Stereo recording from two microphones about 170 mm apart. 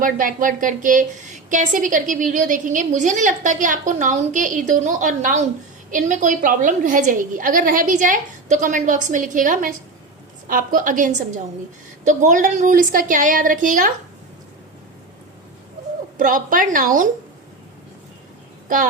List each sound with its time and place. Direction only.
0.0 s a woman's voice: 55° right (ahead or behind)
16.1 s a woman's voice: 55° right (ahead or behind)